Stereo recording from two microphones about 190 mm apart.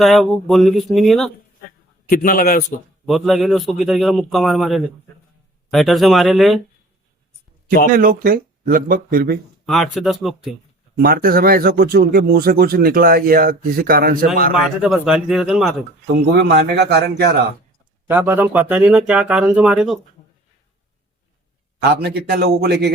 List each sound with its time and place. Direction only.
0.0 s a man's voice: centre (ahead or behind)
2.0 s a man's voice: 50° left (ahead or behind)
3.1 s a man's voice: centre (ahead or behind)
7.9 s speech: 45° right (ahead or behind)
9.6 s a man's voice: centre (ahead or behind)
10.9 s speech: 50° right (ahead or behind)
14.8 s a man's voice: 5° right (ahead or behind)
16.3 s a man's voice: 60° right (ahead or behind)
18.1 s speech: 10° right (ahead or behind)
21.8 s a man's voice: 60° right (ahead or behind)